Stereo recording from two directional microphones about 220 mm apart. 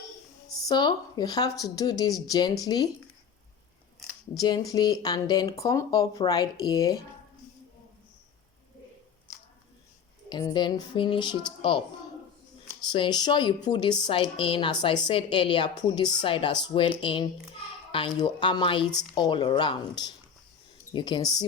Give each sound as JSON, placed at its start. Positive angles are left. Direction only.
{"t": 0.7, "sound": "a woman's voice", "side_deg": 20}
{"t": 4.4, "sound": "a woman's voice", "side_deg": 20}
{"t": 9.3, "sound": "squish", "side_deg": 10}
{"t": 10.2, "sound": "a woman's voice", "side_deg": 20}
{"t": 12.9, "sound": "a woman's voice", "side_deg": 20}